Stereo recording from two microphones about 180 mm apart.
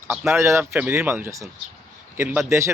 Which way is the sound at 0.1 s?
10° right (ahead or behind).